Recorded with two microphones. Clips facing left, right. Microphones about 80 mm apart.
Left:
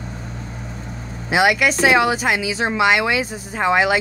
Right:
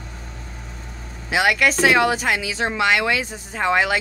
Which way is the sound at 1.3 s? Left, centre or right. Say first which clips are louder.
Left 2 dB; centre.